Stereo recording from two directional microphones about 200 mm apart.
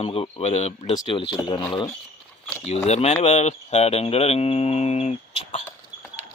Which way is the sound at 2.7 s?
35° left (ahead or behind).